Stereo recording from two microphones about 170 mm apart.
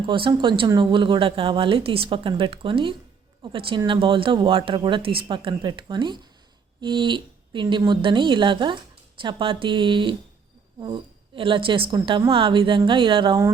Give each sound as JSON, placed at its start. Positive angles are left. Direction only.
{"t": 0.0, "sound": "a woman's voice", "side_deg": -30}